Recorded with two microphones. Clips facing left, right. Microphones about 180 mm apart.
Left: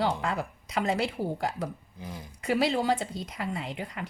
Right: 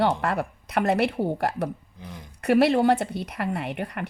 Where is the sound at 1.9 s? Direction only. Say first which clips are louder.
Left 1 dB; 5° left (ahead or behind).